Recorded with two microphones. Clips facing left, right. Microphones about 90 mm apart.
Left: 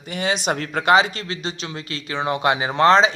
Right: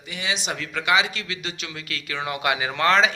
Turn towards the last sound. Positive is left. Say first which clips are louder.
# left 5 dB
turn(degrees=30)  # may be behind; listen again after turning